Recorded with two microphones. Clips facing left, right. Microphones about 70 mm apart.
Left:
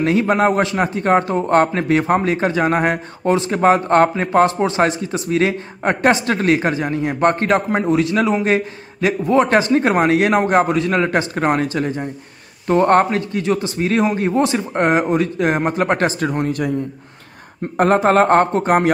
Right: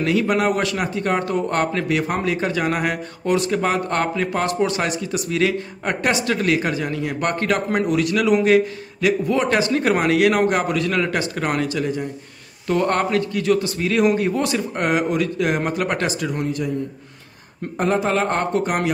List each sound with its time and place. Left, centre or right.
0.0 s a man's voice: left
17.7 s a man's voice: left